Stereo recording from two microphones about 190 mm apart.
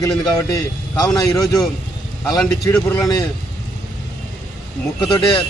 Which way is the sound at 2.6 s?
15° left (ahead or behind).